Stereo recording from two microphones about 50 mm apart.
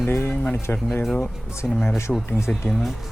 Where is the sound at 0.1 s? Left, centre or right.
Left.